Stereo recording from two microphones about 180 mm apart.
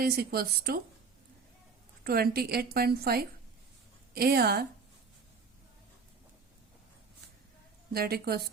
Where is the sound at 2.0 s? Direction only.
60° right (ahead or behind).